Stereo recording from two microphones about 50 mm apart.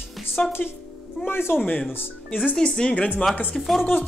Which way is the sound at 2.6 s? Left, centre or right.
Centre.